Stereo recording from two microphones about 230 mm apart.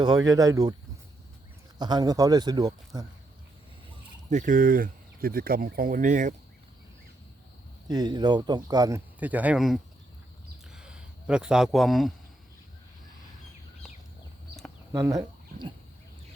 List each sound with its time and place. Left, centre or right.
0.0 s speech: centre
1.8 s speech: centre
4.3 s speech: right
7.9 s speech: centre
10.7 s a sound: centre
14.9 s speech: centre